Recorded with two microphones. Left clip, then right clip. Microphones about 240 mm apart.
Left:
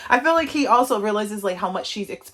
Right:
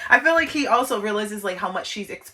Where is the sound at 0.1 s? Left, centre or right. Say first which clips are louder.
Right 1 dB; centre.